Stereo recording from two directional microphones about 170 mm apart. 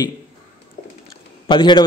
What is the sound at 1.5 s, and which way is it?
Speech, 25° left (ahead or behind).